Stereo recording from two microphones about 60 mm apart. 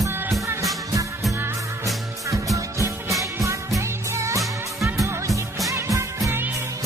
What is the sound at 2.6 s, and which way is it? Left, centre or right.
Music, right.